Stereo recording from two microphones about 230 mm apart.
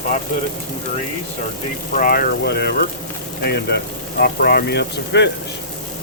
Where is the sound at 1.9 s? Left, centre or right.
Left.